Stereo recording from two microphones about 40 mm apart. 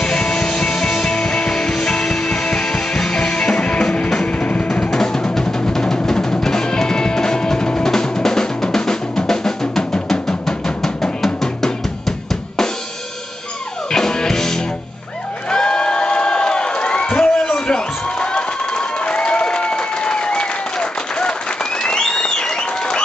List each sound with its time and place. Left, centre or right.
0.0 s music: left
4.9 s music: centre
13.9 s music: centre
15.5 s crowd: centre
21.8 s applause: left